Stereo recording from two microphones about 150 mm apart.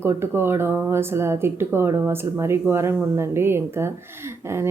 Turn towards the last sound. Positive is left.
turn(degrees=-15)  # may be behind; listen again after turning